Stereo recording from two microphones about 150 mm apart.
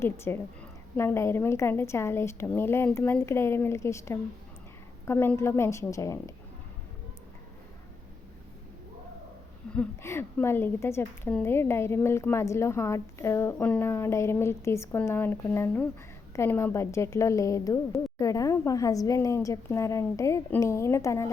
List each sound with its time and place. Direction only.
0.0 s a woman's voice: 15° left (ahead or behind)
9.7 s a woman's voice: 5° left (ahead or behind)